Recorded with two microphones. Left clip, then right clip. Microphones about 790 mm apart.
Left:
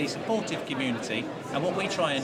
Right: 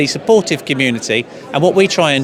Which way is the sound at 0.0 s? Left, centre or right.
Right.